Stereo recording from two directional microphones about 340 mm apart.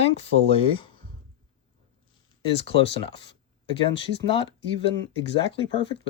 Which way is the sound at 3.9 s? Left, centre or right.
Centre.